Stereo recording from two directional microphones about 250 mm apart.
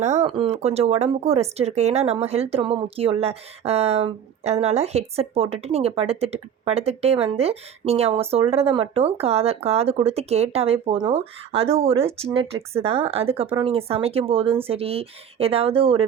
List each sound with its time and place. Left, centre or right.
0.0 s speech: right